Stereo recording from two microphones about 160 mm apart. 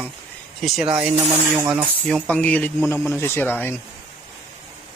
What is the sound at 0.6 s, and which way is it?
Speech, 5° right (ahead or behind).